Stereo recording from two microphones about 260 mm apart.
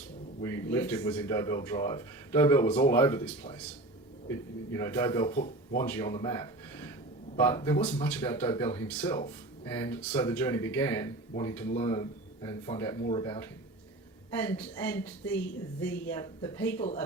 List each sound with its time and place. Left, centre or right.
0.4 s speech: centre
7.4 s speech: centre
14.4 s speech: centre